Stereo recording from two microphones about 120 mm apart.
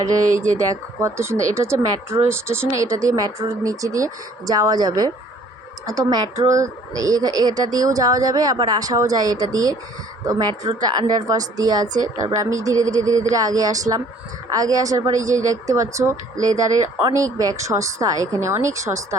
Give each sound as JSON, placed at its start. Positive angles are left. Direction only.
{"t": 0.3, "sound": "speech", "side_deg": -25}